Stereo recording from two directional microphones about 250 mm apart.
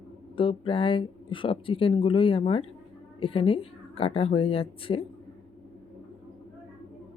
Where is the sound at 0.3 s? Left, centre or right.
Left.